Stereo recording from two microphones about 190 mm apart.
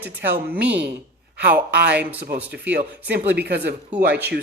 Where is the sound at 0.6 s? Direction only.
60° right (ahead or behind).